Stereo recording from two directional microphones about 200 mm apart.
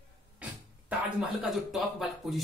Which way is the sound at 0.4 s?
5° right (ahead or behind).